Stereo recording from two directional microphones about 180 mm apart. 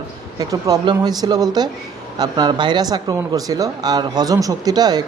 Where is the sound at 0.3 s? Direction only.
20° right (ahead or behind).